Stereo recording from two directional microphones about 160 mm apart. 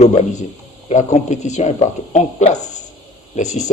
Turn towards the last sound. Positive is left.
turn(degrees=45)  # may be behind; listen again after turning